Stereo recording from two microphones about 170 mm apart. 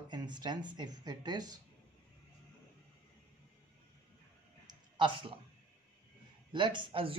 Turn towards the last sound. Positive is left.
turn(degrees=-30)  # may be behind; listen again after turning